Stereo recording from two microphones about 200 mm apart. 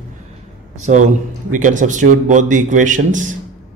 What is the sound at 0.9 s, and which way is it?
A man's voice, 35° right (ahead or behind).